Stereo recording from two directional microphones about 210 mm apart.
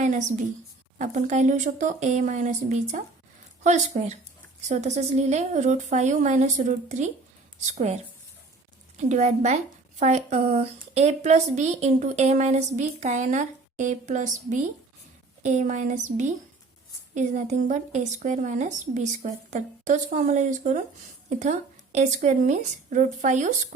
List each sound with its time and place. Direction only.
0.0 s a woman's voice: 35° right (ahead or behind)